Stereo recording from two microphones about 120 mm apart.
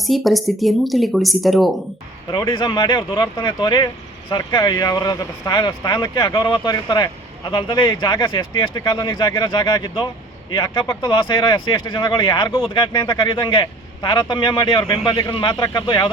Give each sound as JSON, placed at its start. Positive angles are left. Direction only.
{"t": 0.0, "sound": "speech", "side_deg": 0}
{"t": 2.5, "sound": "speech", "side_deg": 45}